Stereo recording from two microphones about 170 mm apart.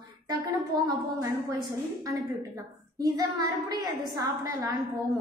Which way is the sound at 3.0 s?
20° right (ahead or behind).